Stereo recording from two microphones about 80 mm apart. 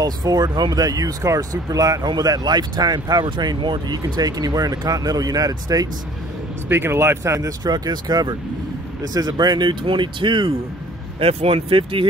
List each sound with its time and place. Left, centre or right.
0.0 s speech: right
6.7 s speech: right
7.6 s speech: right
11.7 s speech: right